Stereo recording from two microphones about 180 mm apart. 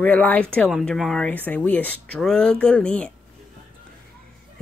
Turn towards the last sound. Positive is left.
turn(degrees=5)  # may be behind; listen again after turning